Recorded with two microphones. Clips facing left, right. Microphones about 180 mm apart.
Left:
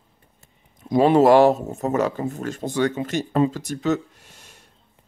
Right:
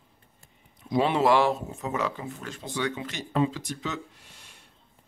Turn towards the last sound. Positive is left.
turn(degrees=45)  # may be behind; listen again after turning